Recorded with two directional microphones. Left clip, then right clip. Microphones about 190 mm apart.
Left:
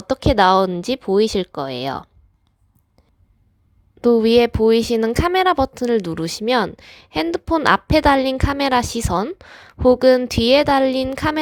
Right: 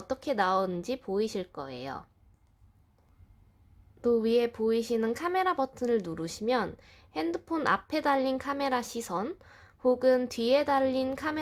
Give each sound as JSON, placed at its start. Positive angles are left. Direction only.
{"t": 0.1, "sound": "a woman's voice", "side_deg": 45}
{"t": 4.0, "sound": "a woman's voice", "side_deg": 45}